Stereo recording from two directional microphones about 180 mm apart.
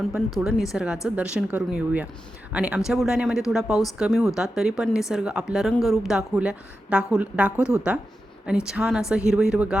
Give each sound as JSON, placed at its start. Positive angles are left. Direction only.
{"t": 0.1, "sound": "a woman's voice", "side_deg": 0}